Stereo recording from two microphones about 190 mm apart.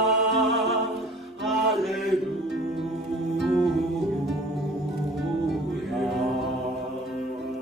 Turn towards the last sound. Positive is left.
turn(degrees=0)  # may be behind; listen again after turning